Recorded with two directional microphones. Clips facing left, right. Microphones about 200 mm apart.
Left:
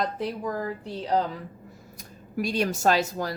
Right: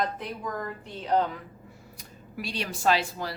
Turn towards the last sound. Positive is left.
turn(degrees=45)  # may be behind; listen again after turning